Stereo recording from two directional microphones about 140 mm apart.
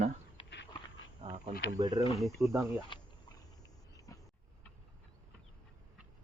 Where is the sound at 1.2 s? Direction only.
55° right (ahead or behind).